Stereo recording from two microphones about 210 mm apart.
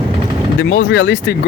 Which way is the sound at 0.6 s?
70° left (ahead or behind).